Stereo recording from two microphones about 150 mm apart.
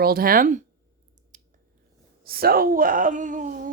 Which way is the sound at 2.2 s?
90° right.